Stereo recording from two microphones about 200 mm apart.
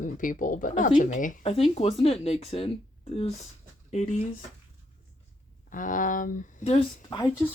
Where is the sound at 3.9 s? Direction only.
35° left (ahead or behind).